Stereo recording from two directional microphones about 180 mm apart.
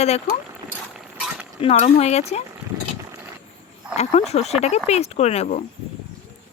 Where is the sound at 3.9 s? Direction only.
35° left (ahead or behind).